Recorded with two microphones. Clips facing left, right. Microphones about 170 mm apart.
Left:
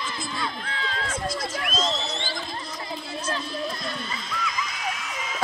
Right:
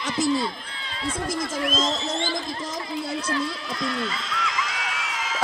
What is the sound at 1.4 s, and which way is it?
Speech, 90° right.